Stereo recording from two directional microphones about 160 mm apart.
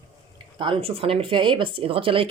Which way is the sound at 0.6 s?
30° right (ahead or behind).